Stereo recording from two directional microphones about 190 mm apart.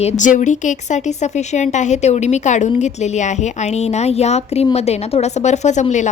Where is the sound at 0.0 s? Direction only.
40° left (ahead or behind).